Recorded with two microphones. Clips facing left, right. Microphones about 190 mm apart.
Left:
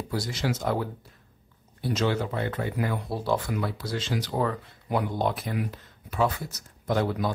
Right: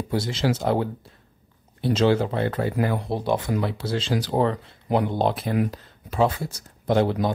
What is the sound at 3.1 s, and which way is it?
Speech, 20° right (ahead or behind).